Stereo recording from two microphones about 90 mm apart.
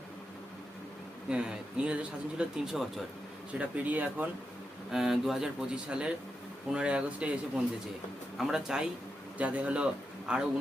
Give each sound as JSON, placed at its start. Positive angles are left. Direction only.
{"t": 1.3, "sound": "speech", "side_deg": -10}
{"t": 4.9, "sound": "a man's voice", "side_deg": -5}